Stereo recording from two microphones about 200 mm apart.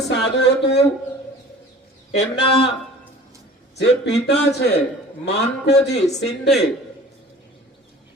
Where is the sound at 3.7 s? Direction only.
55° left (ahead or behind).